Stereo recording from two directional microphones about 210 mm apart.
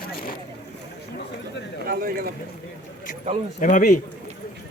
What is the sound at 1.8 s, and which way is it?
Speech, 45° right (ahead or behind).